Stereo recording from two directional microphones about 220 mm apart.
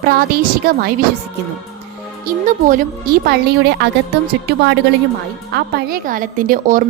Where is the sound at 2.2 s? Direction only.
35° right (ahead or behind).